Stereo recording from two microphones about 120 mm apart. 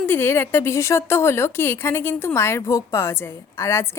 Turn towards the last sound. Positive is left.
turn(degrees=20)  # may be behind; listen again after turning